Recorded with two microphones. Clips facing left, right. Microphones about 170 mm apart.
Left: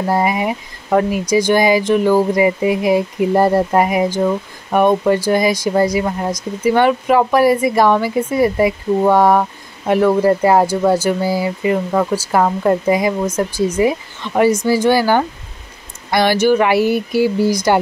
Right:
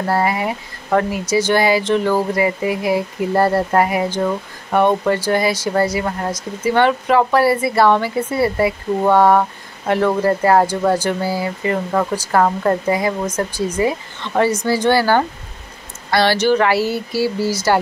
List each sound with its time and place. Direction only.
0.0 s speech: 15° left (ahead or behind)